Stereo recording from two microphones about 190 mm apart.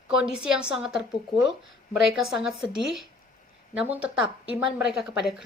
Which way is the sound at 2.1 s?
Centre (ahead or behind).